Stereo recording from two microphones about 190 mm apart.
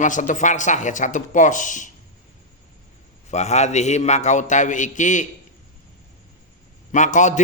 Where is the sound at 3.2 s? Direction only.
35° left (ahead or behind).